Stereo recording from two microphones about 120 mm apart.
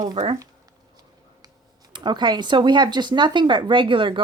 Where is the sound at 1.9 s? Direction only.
40° right (ahead or behind).